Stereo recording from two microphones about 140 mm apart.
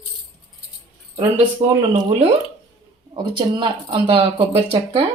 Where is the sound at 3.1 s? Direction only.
35° right (ahead or behind).